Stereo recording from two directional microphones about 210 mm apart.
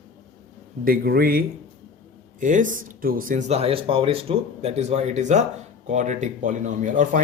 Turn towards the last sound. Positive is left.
turn(degrees=-35)  # may be behind; listen again after turning